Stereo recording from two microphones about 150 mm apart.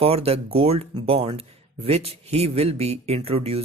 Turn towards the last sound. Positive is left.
turn(degrees=-40)  # may be behind; listen again after turning